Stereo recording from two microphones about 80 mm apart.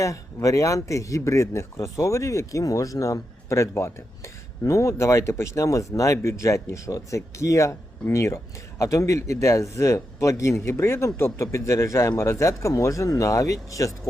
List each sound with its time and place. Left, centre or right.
0.0 s a man's voice: left